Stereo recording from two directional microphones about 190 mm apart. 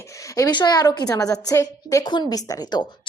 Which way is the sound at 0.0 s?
15° left (ahead or behind).